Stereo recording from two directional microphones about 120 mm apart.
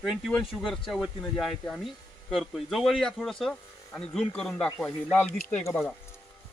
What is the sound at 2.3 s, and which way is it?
A man's voice, centre (ahead or behind).